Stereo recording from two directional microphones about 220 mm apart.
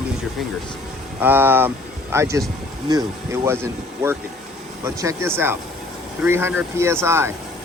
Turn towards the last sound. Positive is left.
turn(degrees=-10)  # may be behind; listen again after turning